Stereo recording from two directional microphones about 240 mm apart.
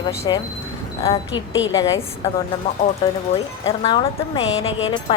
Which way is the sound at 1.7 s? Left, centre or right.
Centre.